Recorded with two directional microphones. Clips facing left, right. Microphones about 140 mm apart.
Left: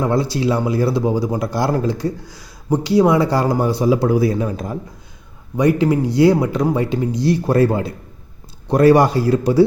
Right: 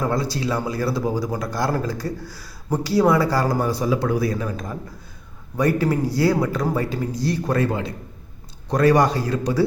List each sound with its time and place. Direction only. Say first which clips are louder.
0.0 s speech: left 5 dB; 25° left (ahead or behind)